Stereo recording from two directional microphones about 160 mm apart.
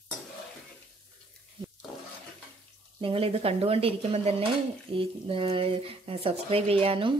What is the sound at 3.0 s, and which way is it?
Speech, 35° right (ahead or behind).